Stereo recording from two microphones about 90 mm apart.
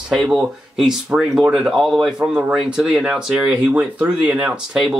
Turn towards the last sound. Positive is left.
turn(degrees=-10)  # may be behind; listen again after turning